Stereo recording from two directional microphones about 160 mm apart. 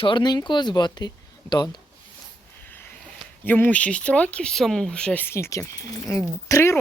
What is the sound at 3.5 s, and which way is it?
Speech, 10° left (ahead or behind).